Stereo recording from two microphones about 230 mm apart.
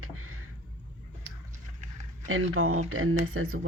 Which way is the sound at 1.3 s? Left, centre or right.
Right.